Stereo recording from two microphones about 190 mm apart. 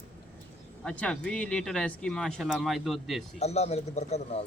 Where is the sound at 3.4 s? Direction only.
35° left (ahead or behind).